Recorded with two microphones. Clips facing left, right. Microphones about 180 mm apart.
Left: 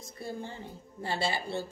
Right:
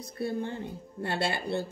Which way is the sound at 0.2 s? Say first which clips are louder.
Right 7 dB; 60° right (ahead or behind).